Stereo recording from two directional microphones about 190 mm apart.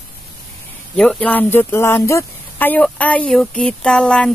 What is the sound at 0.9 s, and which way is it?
Speech, 5° left (ahead or behind).